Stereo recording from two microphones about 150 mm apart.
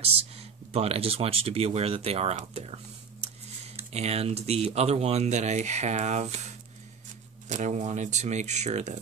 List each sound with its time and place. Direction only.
0.4 s speech: 45° right (ahead or behind)